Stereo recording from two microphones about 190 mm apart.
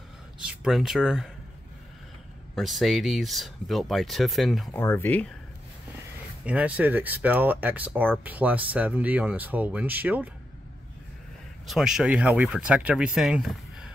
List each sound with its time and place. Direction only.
0.4 s speech: 5° right (ahead or behind)
2.5 s speech: centre (ahead or behind)
4.7 s speech: 10° left (ahead or behind)
6.4 s speech: 5° right (ahead or behind)
11.6 s speech: centre (ahead or behind)